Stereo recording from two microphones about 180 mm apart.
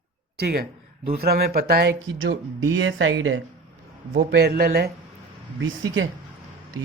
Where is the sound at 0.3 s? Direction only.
60° right (ahead or behind); by 3.4 s 90° right.